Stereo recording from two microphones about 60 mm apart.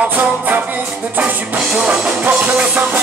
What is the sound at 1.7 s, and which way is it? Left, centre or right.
Music, right.